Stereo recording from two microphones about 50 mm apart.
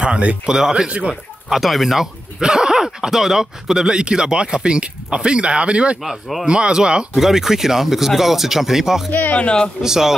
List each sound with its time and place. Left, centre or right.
0.0 s a sound: right
0.5 s speech: centre
1.5 s speech: centre; by 5.9 s right
6.0 s speech: centre
6.4 s speech: centre
7.2 s speech: centre
9.1 s speech: left
9.4 s a man's voice: centre
9.8 s speech: centre